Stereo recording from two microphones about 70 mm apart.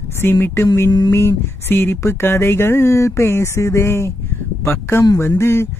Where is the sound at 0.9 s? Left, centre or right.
Left.